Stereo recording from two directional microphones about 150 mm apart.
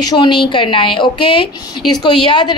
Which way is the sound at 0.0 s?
30° left (ahead or behind).